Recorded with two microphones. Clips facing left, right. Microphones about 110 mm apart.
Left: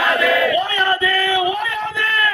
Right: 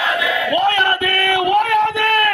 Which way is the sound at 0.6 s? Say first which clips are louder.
Right 2 dB; 60° right (ahead or behind).